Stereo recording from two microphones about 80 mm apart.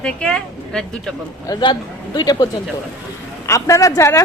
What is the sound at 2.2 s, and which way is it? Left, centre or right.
Speech, left.